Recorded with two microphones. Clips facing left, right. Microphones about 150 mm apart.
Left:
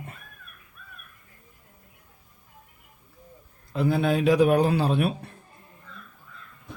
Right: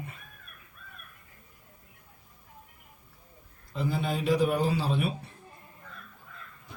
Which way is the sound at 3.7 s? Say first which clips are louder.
Left 7 dB; 65° left (ahead or behind).